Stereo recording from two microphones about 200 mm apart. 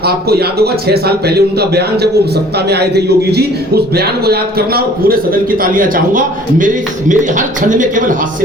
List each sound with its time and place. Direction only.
0.0 s a man's voice: 50° right (ahead or behind)